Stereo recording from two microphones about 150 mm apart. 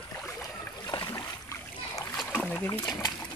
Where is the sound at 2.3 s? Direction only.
10° left (ahead or behind).